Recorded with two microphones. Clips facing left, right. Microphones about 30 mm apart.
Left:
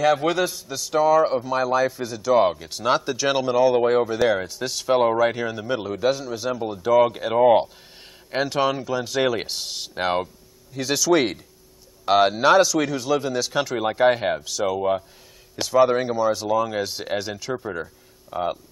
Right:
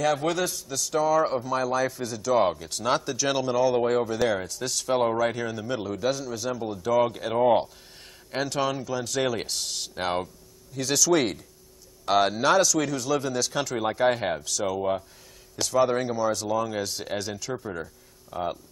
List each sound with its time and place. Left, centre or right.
0.0 s a man's voice: left